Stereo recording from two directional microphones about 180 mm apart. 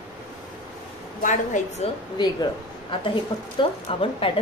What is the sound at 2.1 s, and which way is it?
A woman's voice, 25° left (ahead or behind).